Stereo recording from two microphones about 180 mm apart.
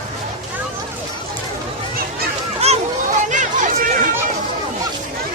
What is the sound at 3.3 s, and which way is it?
Chatter, 45° right (ahead or behind).